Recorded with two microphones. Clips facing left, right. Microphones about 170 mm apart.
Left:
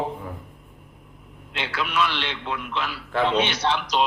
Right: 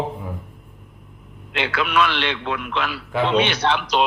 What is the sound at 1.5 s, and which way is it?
A man's voice, 70° right (ahead or behind).